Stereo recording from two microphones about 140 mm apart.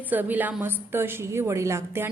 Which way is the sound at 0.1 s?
15° right (ahead or behind).